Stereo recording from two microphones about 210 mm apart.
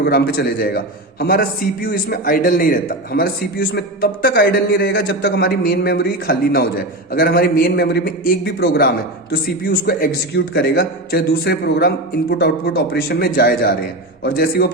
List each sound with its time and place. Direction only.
0.0 s a man's voice: 45° left (ahead or behind)